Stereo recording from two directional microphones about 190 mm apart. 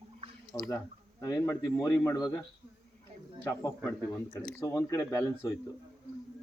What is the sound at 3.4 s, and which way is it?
Speech, 15° left (ahead or behind).